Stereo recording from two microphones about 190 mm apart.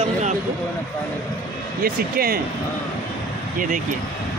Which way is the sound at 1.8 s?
50° right (ahead or behind).